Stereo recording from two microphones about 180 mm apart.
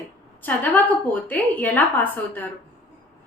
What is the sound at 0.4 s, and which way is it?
A woman's voice, 10° left (ahead or behind).